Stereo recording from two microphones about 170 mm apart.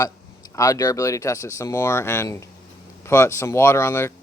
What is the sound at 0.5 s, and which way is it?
Speech, 20° left (ahead or behind).